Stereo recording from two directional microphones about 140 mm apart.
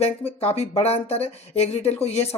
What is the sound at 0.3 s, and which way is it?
Speech, 45° left (ahead or behind).